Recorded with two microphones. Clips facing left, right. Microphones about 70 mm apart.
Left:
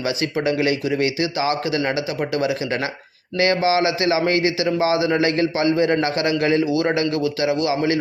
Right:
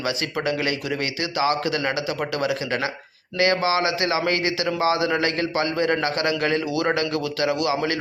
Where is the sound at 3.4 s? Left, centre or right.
Right.